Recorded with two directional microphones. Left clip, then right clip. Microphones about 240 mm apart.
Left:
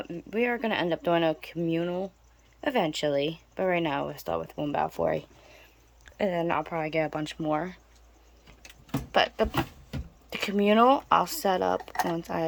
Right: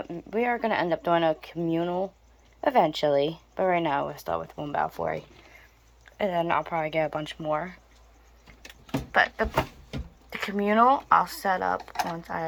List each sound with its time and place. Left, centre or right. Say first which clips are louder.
0.0 s speech: right 1 dB; centre
8.9 s keys jangling: right 2 dB; left
10.2 s speech: left 2 dB; left